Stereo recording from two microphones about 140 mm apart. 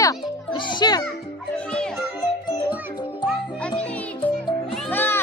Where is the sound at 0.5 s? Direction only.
30° left (ahead or behind).